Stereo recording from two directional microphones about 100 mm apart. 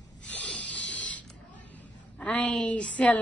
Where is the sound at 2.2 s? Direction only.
10° left (ahead or behind).